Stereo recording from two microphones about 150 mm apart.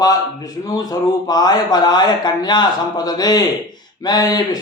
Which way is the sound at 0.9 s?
25° left (ahead or behind).